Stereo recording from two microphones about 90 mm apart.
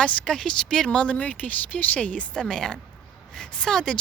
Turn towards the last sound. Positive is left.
turn(degrees=5)  # may be behind; listen again after turning